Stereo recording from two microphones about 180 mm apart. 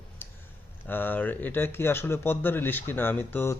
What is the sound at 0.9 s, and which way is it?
A man's voice, 10° left (ahead or behind).